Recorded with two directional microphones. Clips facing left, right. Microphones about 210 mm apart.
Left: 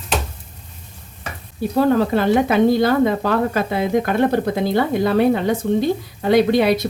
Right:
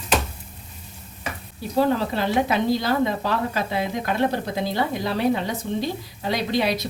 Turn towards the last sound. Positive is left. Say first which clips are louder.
# left 8 dB
turn(degrees=55)  # may be behind; listen again after turning